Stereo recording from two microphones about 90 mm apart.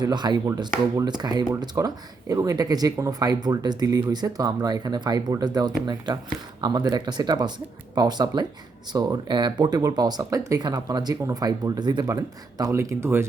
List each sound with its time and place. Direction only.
0.0 s speech: 55° right (ahead or behind)
1.7 s speech: 40° right (ahead or behind)
12.0 s speech: 40° right (ahead or behind)